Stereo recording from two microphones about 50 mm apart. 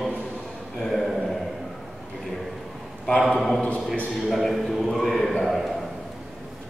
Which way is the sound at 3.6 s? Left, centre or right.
Left.